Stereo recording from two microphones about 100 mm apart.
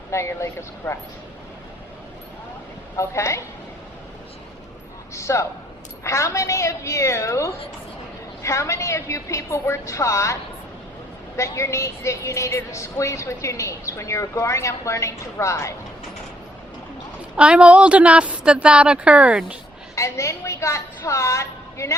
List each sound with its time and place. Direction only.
0.1 s a woman's voice: 30° left (ahead or behind)
2.9 s a woman's voice: 30° left (ahead or behind)
5.1 s a woman's voice: 30° left (ahead or behind)
11.3 s a woman's voice: 30° left (ahead or behind)
17.3 s a woman's voice: 10° right (ahead or behind)
20.0 s a woman's voice: 30° left (ahead or behind)